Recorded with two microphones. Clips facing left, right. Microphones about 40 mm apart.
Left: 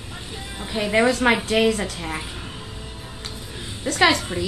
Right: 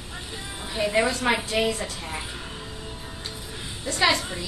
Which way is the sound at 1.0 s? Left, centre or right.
Left.